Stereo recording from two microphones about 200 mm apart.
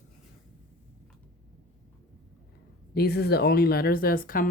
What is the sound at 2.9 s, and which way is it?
Speech, 50° left (ahead or behind).